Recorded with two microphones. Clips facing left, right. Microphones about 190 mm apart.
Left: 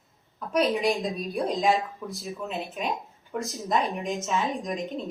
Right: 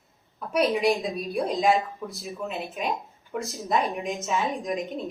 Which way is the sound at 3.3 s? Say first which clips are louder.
Right 1 dB; centre (ahead or behind).